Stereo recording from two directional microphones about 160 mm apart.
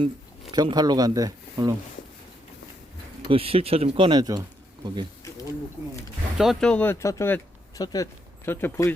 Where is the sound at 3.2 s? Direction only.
35° right (ahead or behind).